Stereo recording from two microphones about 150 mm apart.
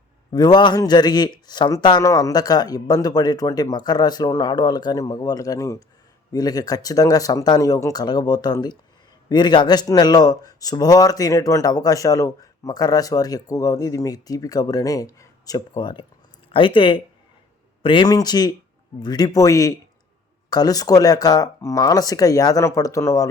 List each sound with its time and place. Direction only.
0.3 s a man's voice: 30° left (ahead or behind)